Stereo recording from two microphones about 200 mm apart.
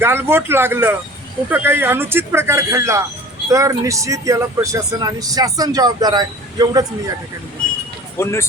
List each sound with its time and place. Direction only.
0.0 s speech: 10° right (ahead or behind)
8.2 s speech: 15° left (ahead or behind)